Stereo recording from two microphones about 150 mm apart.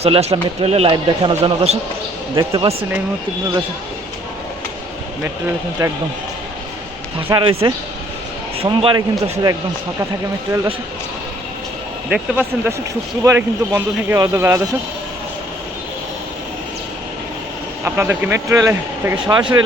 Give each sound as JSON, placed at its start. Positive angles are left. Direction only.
{"t": 0.0, "sound": "speech", "side_deg": -40}
{"t": 2.3, "sound": "speech", "side_deg": -30}
{"t": 5.8, "sound": "speech", "side_deg": -25}
{"t": 7.2, "sound": "speech", "side_deg": -35}
{"t": 12.0, "sound": "speech", "side_deg": -5}
{"t": 13.2, "sound": "speech", "side_deg": -15}
{"t": 17.8, "sound": "speech", "side_deg": -15}
{"t": 19.3, "sound": "speech", "side_deg": -30}